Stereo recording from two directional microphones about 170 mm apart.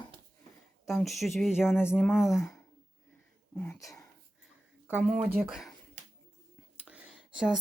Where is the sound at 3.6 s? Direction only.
15° left (ahead or behind).